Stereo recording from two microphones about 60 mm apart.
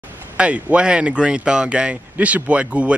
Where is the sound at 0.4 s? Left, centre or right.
Centre.